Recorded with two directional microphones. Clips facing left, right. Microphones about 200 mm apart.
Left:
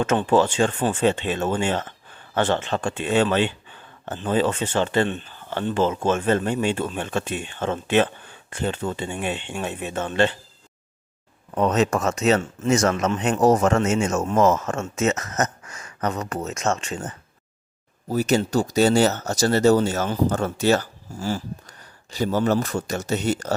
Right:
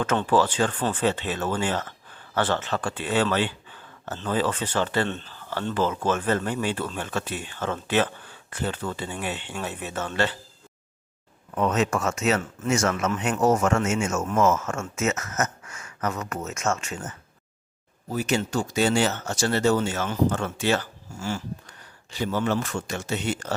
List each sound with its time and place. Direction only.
0.0 s speech: 25° left (ahead or behind)
11.5 s speech: 35° left (ahead or behind)